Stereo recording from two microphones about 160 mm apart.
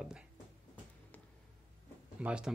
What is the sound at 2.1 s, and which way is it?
Speech, 5° right (ahead or behind).